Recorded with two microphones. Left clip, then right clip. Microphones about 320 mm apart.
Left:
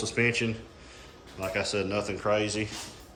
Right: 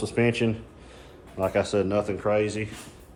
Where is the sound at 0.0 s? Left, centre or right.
Centre.